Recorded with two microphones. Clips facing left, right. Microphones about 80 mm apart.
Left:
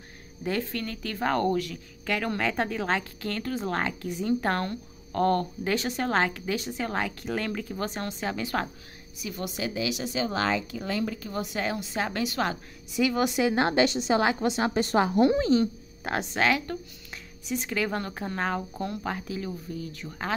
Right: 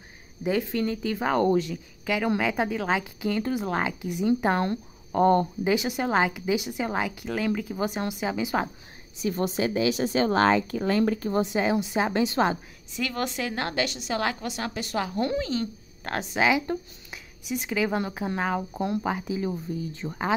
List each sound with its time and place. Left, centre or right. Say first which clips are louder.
0.4 s speech: right 4 dB; centre
2.0 s speech: right 3 dB; centre
9.2 s speech: right 7 dB; right
11.4 s a woman's voice: right 6 dB; right
12.9 s a woman's voice: left 5 dB; centre; by 15.6 s left
15.6 s speech: left 4 dB; centre
16.3 s speech: right 3 dB; centre
19.5 s a woman's voice: right 4 dB; right